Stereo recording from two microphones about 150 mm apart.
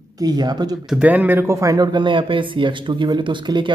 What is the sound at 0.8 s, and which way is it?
Speech, 5° right (ahead or behind).